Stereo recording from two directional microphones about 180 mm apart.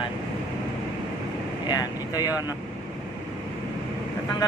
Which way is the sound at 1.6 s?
20° left (ahead or behind).